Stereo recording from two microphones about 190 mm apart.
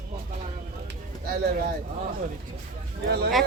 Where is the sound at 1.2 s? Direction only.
55° right (ahead or behind).